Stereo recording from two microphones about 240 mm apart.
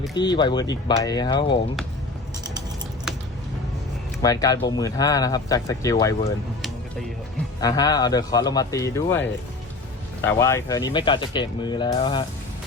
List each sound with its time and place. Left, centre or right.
0.2 s speech: centre
4.2 s speech: centre
7.6 s speech: centre